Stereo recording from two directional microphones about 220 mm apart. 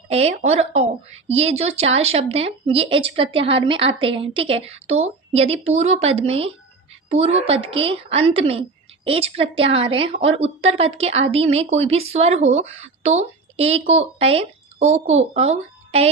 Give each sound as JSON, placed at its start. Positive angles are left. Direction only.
{"t": 0.1, "sound": "speech", "side_deg": -30}